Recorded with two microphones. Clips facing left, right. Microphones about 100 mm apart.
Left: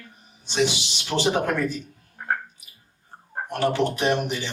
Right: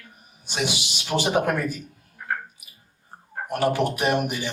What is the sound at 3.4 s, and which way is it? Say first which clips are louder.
Speech: even; 10° right (ahead or behind).